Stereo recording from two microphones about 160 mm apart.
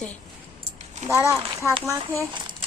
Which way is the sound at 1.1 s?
15° right (ahead or behind).